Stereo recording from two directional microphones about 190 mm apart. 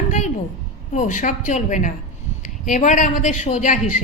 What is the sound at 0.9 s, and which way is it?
A woman's voice, 40° left (ahead or behind).